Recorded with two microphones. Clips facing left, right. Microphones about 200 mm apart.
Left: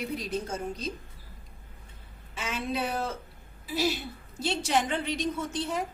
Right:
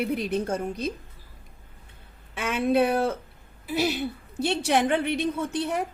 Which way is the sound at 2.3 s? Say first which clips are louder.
Right 10 dB; 60° right (ahead or behind).